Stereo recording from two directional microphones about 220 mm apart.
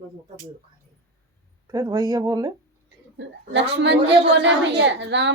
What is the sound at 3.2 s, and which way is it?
A woman's voice, 55° right (ahead or behind).